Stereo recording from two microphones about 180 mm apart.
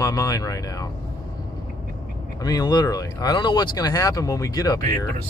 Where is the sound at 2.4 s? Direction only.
20° left (ahead or behind).